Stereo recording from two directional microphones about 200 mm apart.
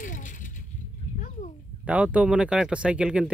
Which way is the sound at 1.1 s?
40° left (ahead or behind).